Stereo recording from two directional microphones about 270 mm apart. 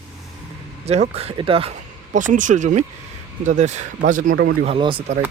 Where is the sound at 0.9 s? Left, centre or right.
Right.